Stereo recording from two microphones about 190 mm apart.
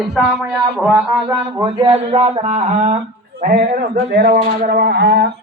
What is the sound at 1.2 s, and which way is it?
Speech, 25° right (ahead or behind).